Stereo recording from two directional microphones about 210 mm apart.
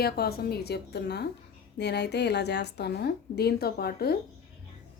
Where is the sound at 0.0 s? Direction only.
50° left (ahead or behind).